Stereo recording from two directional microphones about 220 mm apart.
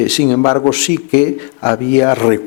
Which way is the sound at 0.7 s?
10° left (ahead or behind).